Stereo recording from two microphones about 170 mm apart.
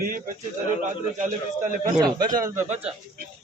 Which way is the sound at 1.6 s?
50° right (ahead or behind).